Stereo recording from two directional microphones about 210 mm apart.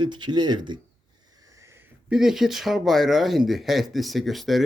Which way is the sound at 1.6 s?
10° right (ahead or behind).